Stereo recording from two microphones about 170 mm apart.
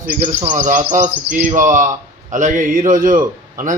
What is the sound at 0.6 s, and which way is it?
A man's voice, 50° right (ahead or behind).